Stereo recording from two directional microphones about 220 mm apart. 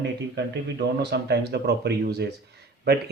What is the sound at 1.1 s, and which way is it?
Speech, 50° right (ahead or behind).